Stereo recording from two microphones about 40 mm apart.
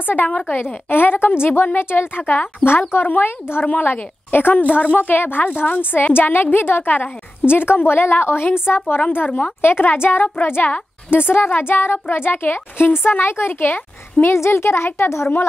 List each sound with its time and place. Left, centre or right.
0.0 s a woman's voice: left
0.8 s a woman's voice: left
2.1 s a woman's voice: left
4.6 s a woman's voice: left
7.4 s a woman's voice: left
8.6 s speech: left
9.1 s a woman's voice: left
9.6 s speech: left
14.2 s speech: left